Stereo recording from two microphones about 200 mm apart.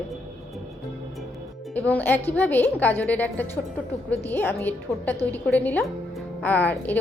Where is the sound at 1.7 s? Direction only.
10° left (ahead or behind).